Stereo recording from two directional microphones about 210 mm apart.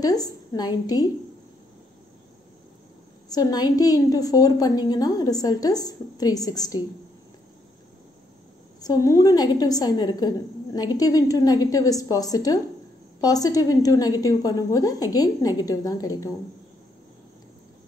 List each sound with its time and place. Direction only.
0.0 s a woman's voice: 20° left (ahead or behind)
3.3 s a woman's voice: 20° left (ahead or behind)
8.8 s a woman's voice: 15° left (ahead or behind)